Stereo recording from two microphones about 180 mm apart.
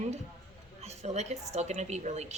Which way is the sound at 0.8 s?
35° right (ahead or behind).